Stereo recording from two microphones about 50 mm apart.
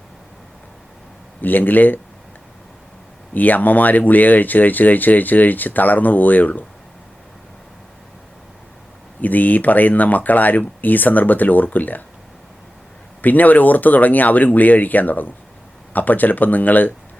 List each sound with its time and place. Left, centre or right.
1.4 s speech: left
3.3 s speech: left
9.2 s speech: left
13.2 s speech: left